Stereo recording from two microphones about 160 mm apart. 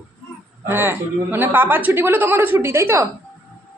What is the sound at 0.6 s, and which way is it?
A woman's voice, 15° right (ahead or behind).